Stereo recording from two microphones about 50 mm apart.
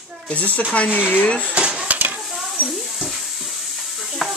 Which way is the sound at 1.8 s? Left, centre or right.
Right.